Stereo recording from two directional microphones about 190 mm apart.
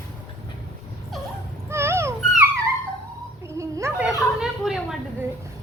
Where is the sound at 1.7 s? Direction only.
15° right (ahead or behind).